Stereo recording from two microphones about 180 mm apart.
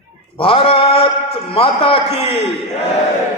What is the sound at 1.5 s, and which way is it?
Speech, 30° left (ahead or behind).